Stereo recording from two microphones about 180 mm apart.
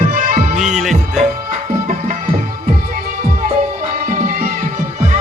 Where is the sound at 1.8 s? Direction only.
45° right (ahead or behind).